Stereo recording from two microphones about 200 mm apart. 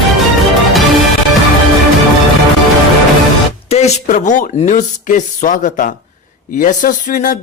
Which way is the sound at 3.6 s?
35° left (ahead or behind).